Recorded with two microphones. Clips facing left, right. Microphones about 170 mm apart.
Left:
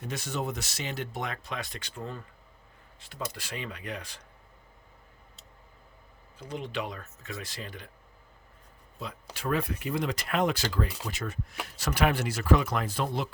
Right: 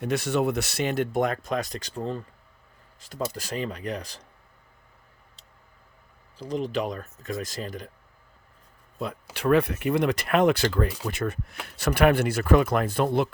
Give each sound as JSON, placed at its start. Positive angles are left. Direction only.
{"t": 0.0, "sound": "speech", "side_deg": -70}
{"t": 6.3, "sound": "speech", "side_deg": -35}
{"t": 9.3, "sound": "speech", "side_deg": -70}